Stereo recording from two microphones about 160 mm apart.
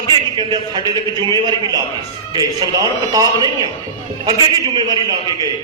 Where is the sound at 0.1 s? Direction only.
30° right (ahead or behind).